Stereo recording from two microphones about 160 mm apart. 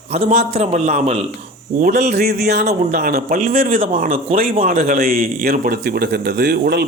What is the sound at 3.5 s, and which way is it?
Speech, 35° right (ahead or behind).